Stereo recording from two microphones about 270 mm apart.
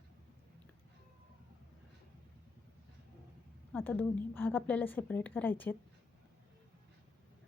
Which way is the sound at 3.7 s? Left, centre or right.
Centre.